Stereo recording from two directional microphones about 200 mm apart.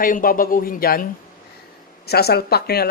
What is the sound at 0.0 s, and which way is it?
Speech, 45° left (ahead or behind).